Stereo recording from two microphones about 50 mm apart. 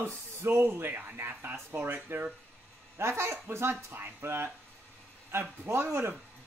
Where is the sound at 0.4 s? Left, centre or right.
Right.